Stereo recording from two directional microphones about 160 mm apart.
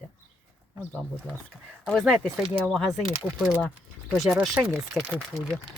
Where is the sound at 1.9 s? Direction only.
5° left (ahead or behind).